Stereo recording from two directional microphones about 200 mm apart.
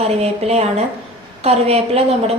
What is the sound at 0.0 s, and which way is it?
A woman's voice, 30° right (ahead or behind).